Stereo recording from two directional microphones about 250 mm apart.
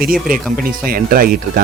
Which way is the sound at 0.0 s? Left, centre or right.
Right.